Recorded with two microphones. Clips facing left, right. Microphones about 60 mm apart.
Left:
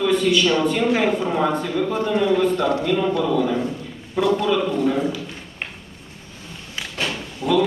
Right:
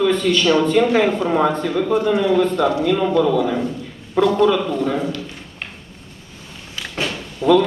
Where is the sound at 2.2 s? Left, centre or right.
Centre.